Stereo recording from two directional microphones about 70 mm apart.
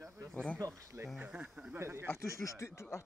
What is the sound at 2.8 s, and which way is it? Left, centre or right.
Speech, left.